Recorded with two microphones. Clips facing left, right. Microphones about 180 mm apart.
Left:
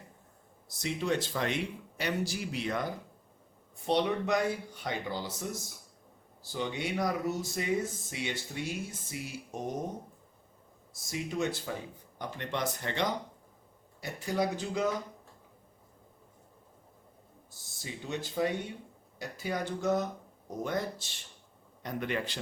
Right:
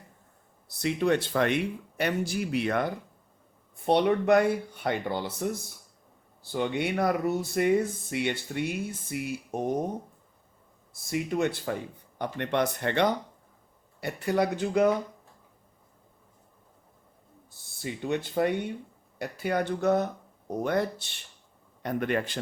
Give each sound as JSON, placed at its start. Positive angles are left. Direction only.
{"t": 0.7, "sound": "speech", "side_deg": -60}
{"t": 10.9, "sound": "speech", "side_deg": -60}
{"t": 17.5, "sound": "a man's voice", "side_deg": -60}